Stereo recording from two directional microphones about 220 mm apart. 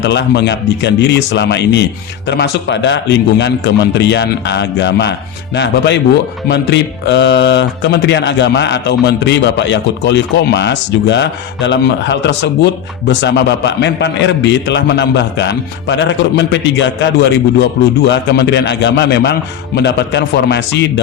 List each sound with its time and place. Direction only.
0.0 s speech: 50° left (ahead or behind)